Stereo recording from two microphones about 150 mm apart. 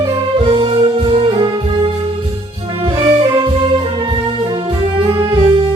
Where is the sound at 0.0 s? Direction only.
35° right (ahead or behind).